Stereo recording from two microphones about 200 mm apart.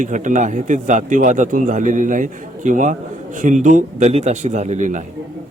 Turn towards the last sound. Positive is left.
turn(degrees=-40)  # may be behind; listen again after turning